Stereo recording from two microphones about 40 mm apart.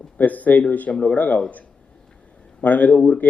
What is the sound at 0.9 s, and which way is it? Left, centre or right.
Speech, left.